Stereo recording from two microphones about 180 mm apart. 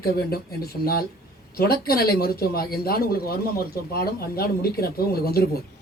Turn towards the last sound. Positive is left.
turn(degrees=60)  # may be behind; listen again after turning